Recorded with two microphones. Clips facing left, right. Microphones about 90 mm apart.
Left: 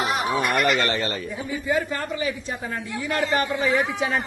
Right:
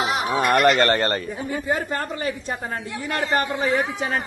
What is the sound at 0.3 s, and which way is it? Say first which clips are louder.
Speech: right 6 dB; 45° right (ahead or behind).